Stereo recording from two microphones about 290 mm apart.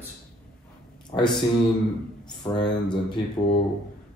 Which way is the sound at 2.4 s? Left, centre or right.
Centre.